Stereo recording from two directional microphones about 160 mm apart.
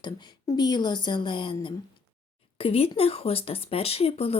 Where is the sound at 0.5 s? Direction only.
25° left (ahead or behind).